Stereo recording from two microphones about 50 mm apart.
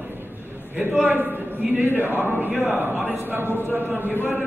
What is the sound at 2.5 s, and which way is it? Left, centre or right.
Speech, right.